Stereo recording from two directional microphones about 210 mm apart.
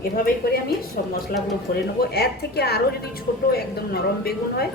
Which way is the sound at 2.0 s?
50° left (ahead or behind).